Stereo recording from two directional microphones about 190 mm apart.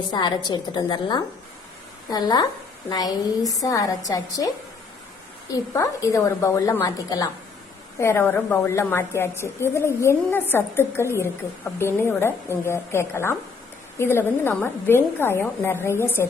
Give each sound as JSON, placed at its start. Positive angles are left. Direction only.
{"t": 0.1, "sound": "a woman's voice", "side_deg": 25}
{"t": 5.7, "sound": "a woman's voice", "side_deg": 15}